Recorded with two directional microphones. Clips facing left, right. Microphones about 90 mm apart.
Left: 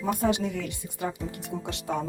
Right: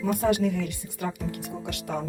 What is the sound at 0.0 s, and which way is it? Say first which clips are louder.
A woman's voice: right 2 dB; 25° left (ahead or behind).